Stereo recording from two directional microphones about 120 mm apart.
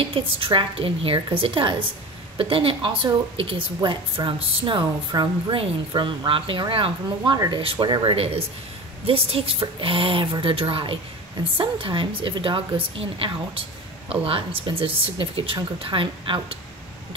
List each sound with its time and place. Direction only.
0.0 s speech: 50° right (ahead or behind)
7.3 s speech: 35° right (ahead or behind)
7.6 s speech: 45° right (ahead or behind)